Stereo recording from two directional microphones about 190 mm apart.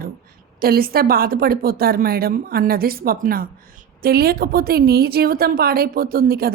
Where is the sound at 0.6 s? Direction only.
50° right (ahead or behind).